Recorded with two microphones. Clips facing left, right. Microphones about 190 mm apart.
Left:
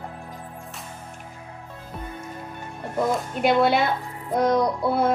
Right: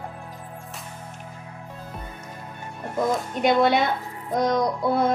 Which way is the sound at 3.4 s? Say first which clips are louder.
Even; 5° left (ahead or behind).